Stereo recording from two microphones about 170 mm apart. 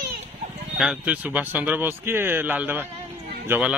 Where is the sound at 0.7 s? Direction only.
5° right (ahead or behind).